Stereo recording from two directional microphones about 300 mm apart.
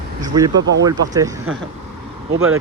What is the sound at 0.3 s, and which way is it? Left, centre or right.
Speech, centre.